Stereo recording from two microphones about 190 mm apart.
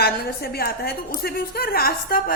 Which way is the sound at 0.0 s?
55° left (ahead or behind).